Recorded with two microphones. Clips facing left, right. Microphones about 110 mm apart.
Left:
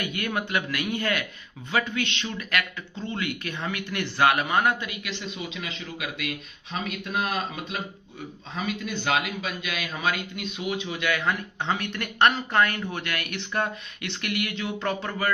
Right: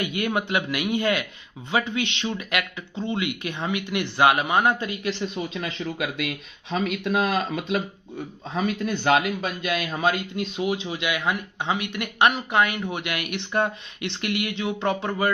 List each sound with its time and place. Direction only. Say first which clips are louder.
0.0 s speech: right 4 dB; 20° right (ahead or behind)
4.8 s a man's voice: right 7 dB; 35° right (ahead or behind)
5.6 s speech: right 6 dB; 55° right (ahead or behind)
8.5 s a man's voice: right 5 dB; 45° right (ahead or behind)
11.0 s speech: left 2 dB; 15° right (ahead or behind)